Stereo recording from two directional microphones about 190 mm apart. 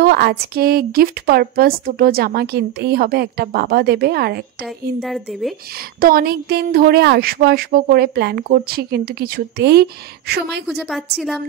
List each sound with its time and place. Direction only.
0.0 s a woman's voice: 55° right (ahead or behind)
5.0 s a woman's voice: centre (ahead or behind)
5.9 s a woman's voice: 50° right (ahead or behind)
10.7 s a woman's voice: centre (ahead or behind)